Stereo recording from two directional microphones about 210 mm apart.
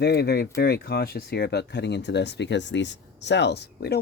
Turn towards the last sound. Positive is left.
turn(degrees=50)  # may be behind; listen again after turning